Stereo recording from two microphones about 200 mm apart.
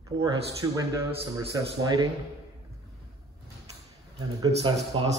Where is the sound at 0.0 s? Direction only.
15° right (ahead or behind).